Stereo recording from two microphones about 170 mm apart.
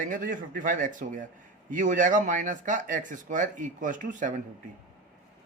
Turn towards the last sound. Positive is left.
turn(degrees=-50)  # may be behind; listen again after turning